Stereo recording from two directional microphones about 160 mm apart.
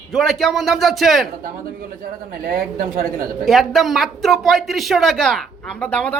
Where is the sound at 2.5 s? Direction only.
65° right (ahead or behind).